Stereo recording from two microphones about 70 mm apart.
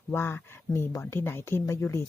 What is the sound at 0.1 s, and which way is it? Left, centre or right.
Speech, left.